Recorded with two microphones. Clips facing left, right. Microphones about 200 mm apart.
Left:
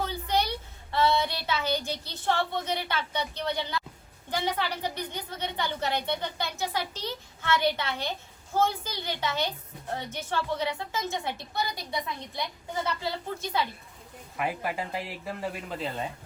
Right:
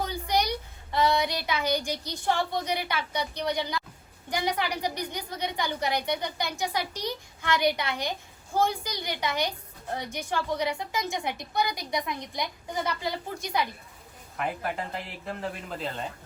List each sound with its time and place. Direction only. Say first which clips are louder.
0.0 s a woman's voice: right 1 dB; 15° right (ahead or behind)
14.3 s speech: even; 5° left (ahead or behind)